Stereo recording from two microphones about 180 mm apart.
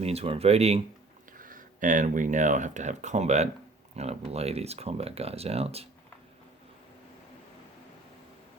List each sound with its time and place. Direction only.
0.0 s speech: 35° right (ahead or behind)
1.4 s speech: 50° right (ahead or behind)